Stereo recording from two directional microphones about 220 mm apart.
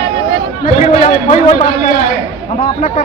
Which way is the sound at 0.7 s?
30° left (ahead or behind).